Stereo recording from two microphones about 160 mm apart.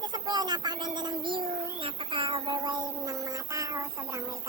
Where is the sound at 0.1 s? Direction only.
25° right (ahead or behind).